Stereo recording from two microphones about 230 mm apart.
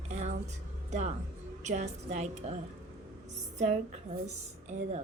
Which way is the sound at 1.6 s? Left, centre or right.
Right.